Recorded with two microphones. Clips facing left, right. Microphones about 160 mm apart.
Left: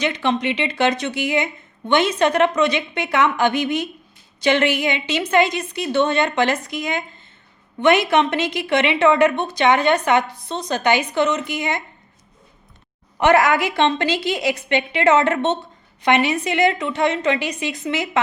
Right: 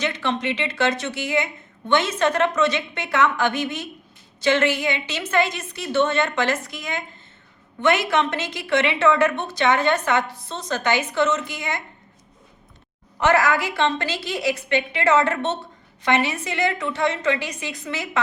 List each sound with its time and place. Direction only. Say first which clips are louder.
0.0 s a woman's voice: left 4 dB; 15° left (ahead or behind)
13.1 s a woman's voice: left 4 dB; 15° left (ahead or behind)